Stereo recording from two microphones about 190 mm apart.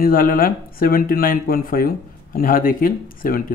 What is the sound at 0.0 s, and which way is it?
Speech, 50° left (ahead or behind).